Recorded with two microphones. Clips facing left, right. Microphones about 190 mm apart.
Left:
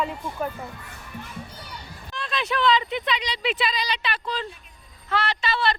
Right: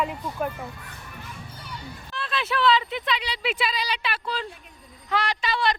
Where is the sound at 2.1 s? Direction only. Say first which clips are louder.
Left 1 dB; 5° right (ahead or behind).